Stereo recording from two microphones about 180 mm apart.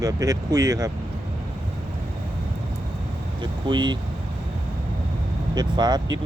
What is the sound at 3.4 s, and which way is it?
Speech, 25° right (ahead or behind).